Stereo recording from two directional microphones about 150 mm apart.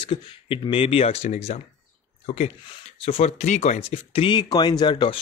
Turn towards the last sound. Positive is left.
turn(degrees=30)  # may be behind; listen again after turning